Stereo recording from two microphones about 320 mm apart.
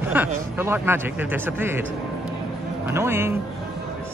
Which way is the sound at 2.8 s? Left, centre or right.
Centre.